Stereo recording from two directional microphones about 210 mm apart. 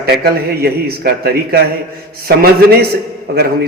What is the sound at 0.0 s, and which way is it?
A man's voice, 45° right (ahead or behind).